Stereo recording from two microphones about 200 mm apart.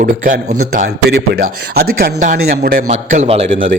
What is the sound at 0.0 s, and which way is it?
Speech, 40° right (ahead or behind).